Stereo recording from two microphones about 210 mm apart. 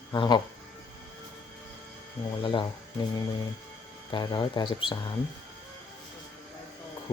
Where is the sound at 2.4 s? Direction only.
25° left (ahead or behind).